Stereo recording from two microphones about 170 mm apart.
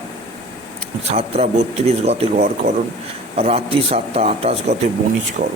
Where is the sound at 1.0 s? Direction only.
40° right (ahead or behind).